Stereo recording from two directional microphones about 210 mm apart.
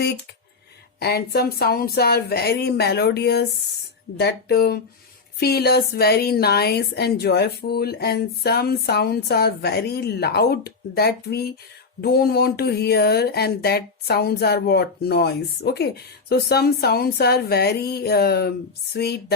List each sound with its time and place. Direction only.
0.9 s a woman's voice: 50° left (ahead or behind)